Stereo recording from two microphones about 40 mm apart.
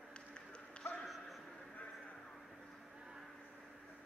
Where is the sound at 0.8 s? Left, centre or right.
Left.